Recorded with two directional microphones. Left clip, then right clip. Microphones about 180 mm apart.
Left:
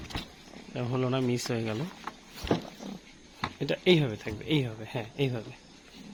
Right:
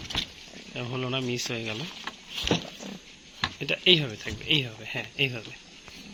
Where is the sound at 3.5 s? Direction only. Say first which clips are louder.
Right 3 dB; 60° left (ahead or behind).